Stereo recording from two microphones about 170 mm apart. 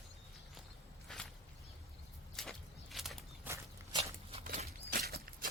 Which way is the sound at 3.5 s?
10° right (ahead or behind).